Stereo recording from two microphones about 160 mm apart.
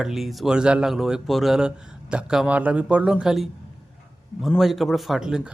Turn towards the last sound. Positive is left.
turn(degrees=-5)  # may be behind; listen again after turning